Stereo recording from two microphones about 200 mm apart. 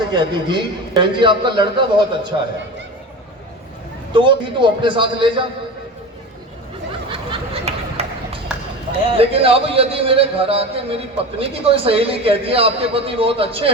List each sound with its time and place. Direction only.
0.1 s a man's voice: 25° right (ahead or behind)
4.1 s a man's voice: 25° right (ahead or behind)
7.1 s a sound: 30° right (ahead or behind)
9.1 s a man's voice: 30° right (ahead or behind)